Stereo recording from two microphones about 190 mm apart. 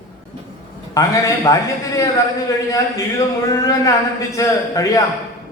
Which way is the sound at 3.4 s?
15° left (ahead or behind).